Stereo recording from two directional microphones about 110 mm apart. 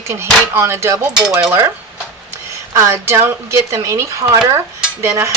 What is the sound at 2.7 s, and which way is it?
Speech, 25° right (ahead or behind).